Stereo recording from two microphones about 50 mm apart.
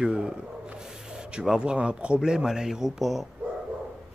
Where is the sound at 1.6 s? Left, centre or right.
Centre.